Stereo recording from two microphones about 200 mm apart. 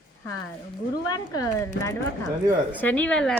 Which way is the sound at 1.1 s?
20° left (ahead or behind).